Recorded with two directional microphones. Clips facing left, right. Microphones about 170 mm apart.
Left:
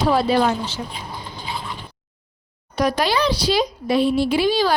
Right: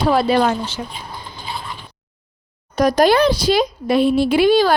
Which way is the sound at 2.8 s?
45° right (ahead or behind).